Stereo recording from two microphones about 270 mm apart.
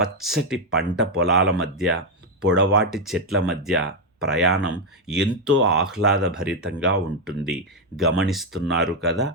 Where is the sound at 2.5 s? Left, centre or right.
Right.